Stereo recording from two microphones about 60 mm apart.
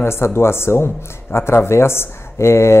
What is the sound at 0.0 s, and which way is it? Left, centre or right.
Speech, left.